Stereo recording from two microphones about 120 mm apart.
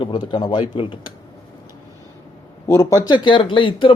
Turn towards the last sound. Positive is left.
turn(degrees=45)  # may be behind; listen again after turning